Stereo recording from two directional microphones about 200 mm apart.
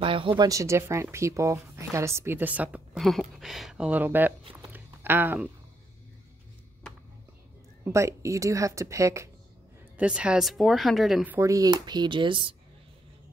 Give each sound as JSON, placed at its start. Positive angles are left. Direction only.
{"t": 0.0, "sound": "speech", "side_deg": -25}
{"t": 4.6, "sound": "a sound", "side_deg": -10}
{"t": 7.8, "sound": "speech", "side_deg": -15}